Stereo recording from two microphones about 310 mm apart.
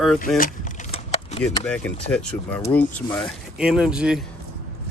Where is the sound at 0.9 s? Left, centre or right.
Centre.